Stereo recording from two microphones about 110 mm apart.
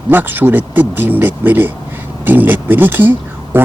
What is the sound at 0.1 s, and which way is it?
Speech, 15° right (ahead or behind).